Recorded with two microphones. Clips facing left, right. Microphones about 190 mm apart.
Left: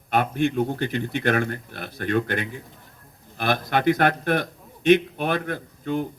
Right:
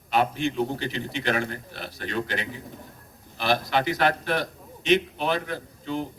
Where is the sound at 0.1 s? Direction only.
55° left (ahead or behind).